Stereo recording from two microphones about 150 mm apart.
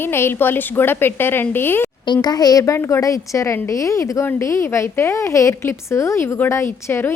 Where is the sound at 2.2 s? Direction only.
25° left (ahead or behind).